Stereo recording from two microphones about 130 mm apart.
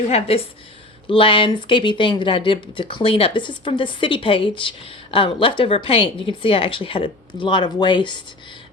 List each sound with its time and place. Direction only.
0.1 s a woman's voice: 50° left (ahead or behind)